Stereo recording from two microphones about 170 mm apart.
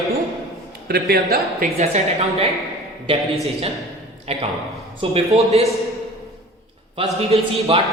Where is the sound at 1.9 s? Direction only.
40° right (ahead or behind).